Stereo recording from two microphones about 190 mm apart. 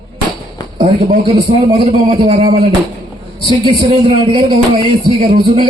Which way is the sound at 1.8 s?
25° right (ahead or behind).